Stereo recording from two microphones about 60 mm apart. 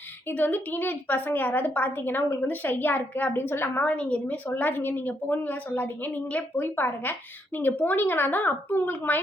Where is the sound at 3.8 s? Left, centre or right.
Left.